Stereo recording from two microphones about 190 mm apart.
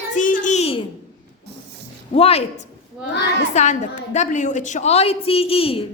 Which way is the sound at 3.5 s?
40° left (ahead or behind).